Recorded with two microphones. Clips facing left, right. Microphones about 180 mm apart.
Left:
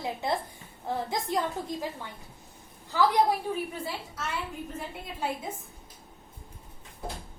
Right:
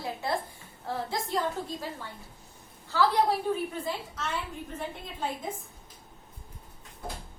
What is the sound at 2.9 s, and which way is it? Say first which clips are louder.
Speech: left 1 dB; 15° left (ahead or behind).